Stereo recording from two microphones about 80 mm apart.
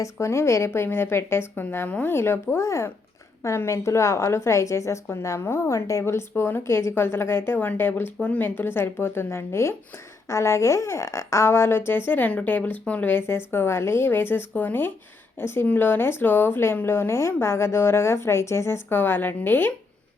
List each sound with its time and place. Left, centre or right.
0.0 s a woman's voice: left